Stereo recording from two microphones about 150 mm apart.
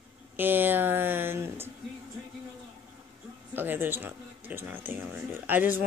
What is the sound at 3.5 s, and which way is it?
Speech, 15° right (ahead or behind).